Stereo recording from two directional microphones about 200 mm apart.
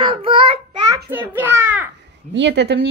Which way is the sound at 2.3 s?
60° right (ahead or behind).